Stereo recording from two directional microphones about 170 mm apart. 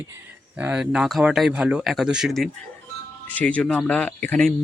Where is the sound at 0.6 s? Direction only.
5° right (ahead or behind).